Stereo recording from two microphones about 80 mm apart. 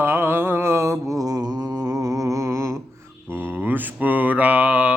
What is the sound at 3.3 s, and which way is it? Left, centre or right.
Mantra, right.